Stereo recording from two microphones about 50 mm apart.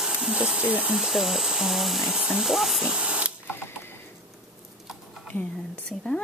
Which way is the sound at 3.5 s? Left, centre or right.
Left.